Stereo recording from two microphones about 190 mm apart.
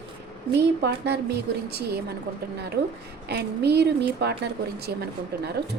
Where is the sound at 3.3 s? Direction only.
60° right (ahead or behind).